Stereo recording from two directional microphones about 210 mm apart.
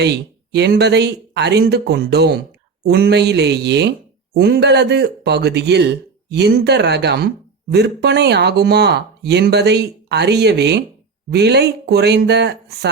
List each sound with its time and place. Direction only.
0.0 s a man's voice: 55° right (ahead or behind)